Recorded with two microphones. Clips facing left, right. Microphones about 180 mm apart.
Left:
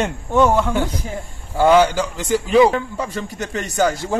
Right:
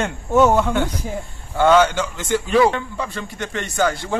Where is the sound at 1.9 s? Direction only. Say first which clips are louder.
Left 2 dB; 35° left (ahead or behind).